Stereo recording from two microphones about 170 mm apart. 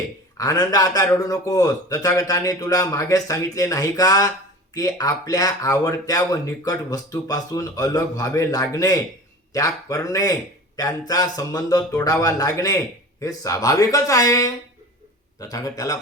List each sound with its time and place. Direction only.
0.3 s speech: 20° left (ahead or behind)